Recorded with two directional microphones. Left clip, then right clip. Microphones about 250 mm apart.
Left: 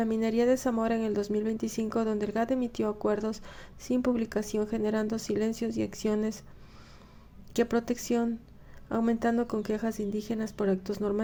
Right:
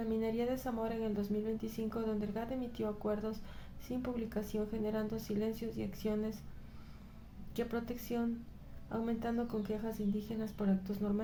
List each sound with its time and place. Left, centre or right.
0.0 s speech: left
7.5 s speech: left